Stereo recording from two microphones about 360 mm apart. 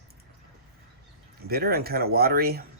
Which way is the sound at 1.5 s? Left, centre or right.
Right.